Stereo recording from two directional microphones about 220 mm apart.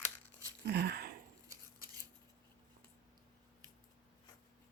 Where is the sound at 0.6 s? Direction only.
50° right (ahead or behind).